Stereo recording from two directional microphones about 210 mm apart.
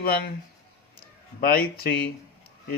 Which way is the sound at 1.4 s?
45° left (ahead or behind).